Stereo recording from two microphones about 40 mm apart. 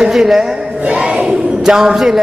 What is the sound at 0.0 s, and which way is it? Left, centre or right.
Speech, centre.